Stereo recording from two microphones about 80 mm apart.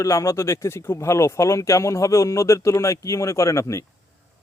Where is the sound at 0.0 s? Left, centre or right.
Left.